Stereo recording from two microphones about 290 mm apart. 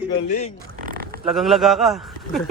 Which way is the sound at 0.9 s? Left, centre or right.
Right.